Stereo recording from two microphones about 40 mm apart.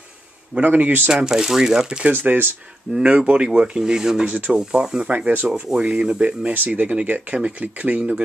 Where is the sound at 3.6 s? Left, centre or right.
Right.